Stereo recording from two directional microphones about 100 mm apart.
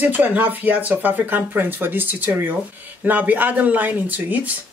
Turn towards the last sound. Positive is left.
turn(degrees=-15)  # may be behind; listen again after turning